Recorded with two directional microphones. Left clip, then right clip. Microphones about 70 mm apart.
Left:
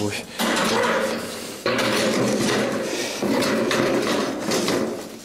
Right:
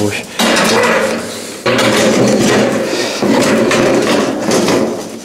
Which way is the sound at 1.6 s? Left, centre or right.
Centre.